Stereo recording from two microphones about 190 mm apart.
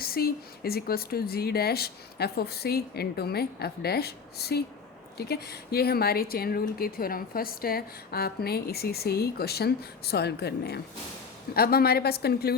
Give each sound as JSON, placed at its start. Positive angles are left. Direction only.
{"t": 0.0, "sound": "speech", "side_deg": 55}